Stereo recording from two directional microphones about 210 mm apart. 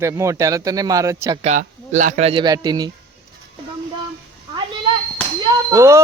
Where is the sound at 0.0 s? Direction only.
15° right (ahead or behind).